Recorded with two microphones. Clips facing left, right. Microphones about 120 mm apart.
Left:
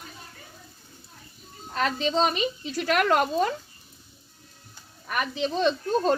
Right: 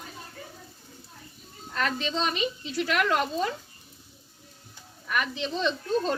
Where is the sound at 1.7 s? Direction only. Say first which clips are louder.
Left 4 dB; 35° left (ahead or behind); by 3.5 s 50° left (ahead or behind).